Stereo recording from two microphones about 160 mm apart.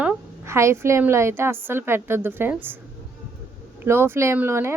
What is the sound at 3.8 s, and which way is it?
Speech, 15° right (ahead or behind).